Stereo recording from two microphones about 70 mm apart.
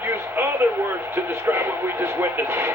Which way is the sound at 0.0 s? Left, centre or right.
Right.